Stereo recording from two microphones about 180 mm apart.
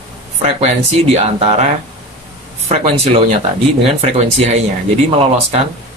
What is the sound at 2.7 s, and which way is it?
Speech, 35° right (ahead or behind).